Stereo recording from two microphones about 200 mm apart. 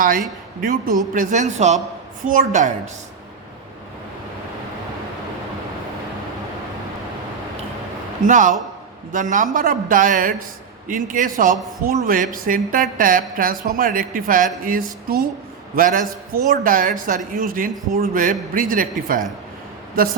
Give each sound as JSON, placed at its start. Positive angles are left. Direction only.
{"t": 0.0, "sound": "a man's voice", "side_deg": -45}
{"t": 8.2, "sound": "a man's voice", "side_deg": -40}